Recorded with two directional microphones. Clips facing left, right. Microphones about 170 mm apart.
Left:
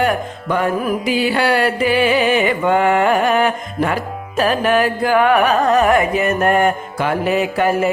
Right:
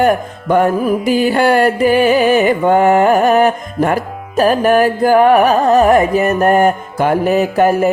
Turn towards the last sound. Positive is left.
turn(degrees=-40)  # may be behind; listen again after turning